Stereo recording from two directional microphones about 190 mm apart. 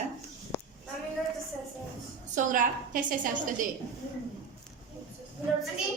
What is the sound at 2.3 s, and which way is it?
A woman's voice, 45° right (ahead or behind).